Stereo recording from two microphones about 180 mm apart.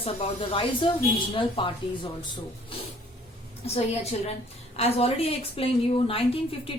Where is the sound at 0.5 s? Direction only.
30° left (ahead or behind).